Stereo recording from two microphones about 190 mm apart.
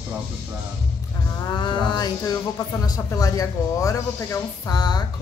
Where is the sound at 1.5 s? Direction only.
25° left (ahead or behind).